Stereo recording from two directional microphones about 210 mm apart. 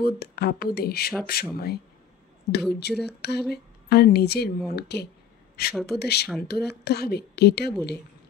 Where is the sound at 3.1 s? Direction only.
50° left (ahead or behind).